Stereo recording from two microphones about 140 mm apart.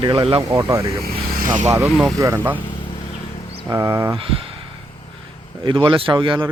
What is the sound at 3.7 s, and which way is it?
Speech, 25° right (ahead or behind).